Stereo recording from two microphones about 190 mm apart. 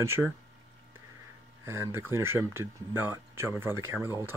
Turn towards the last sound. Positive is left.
turn(degrees=-10)  # may be behind; listen again after turning